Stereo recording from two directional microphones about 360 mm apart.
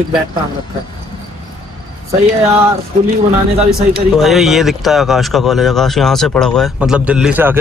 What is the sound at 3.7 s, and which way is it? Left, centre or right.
Speech, centre.